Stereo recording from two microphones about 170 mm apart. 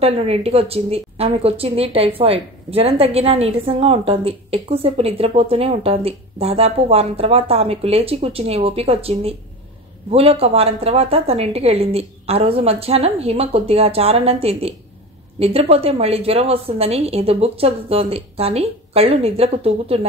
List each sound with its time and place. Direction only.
0.0 s speech: 35° right (ahead or behind)